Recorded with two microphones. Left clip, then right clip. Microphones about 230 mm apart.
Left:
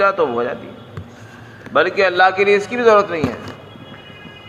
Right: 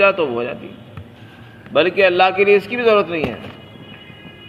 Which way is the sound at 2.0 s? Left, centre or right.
Centre.